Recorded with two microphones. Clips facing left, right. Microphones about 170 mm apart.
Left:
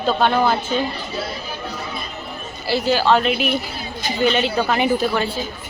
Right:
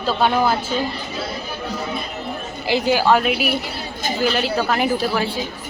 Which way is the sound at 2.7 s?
15° right (ahead or behind).